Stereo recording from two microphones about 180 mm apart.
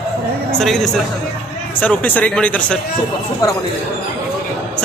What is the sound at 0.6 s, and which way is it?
Speech, centre (ahead or behind).